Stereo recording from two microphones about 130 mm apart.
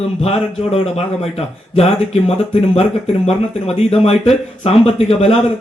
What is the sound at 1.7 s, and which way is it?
Speech, 50° left (ahead or behind).